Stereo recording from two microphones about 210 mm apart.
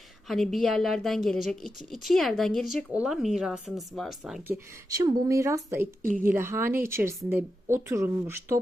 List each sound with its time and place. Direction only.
0.3 s a woman's voice: centre (ahead or behind)
4.5 s speech: 15° right (ahead or behind)
6.0 s a woman's voice: 40° right (ahead or behind)
6.2 s speech: 10° right (ahead or behind)